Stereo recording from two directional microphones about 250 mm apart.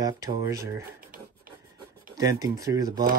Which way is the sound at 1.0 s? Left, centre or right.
Right.